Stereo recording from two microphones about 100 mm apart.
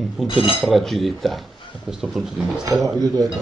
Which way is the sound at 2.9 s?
35° right (ahead or behind).